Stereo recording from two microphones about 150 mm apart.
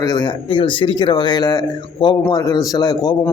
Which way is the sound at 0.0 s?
25° left (ahead or behind).